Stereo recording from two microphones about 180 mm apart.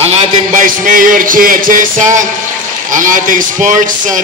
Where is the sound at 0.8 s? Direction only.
50° right (ahead or behind).